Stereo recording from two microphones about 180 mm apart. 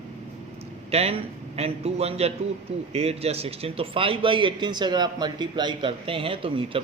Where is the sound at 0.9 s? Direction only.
35° right (ahead or behind).